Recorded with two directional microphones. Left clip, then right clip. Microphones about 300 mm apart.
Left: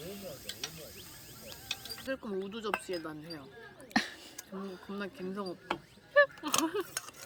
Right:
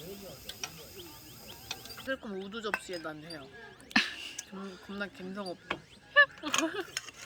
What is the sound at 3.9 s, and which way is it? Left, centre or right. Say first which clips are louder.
Whispering: right 4 dB; centre.